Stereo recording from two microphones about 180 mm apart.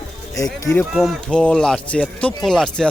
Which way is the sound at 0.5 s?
20° left (ahead or behind).